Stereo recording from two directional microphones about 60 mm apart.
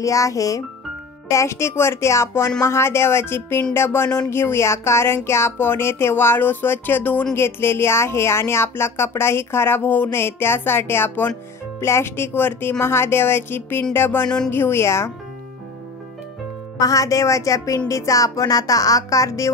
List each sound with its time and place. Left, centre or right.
0.0 s speech: left
1.3 s speech: left
7.3 s speech: left
10.1 s speech: left
14.2 s music: centre
14.5 s speech: left
16.7 s speech: left